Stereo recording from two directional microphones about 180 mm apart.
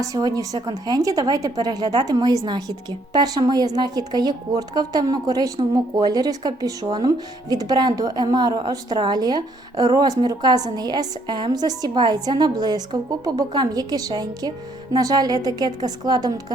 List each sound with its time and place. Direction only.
0.0 s a woman's voice: 20° right (ahead or behind)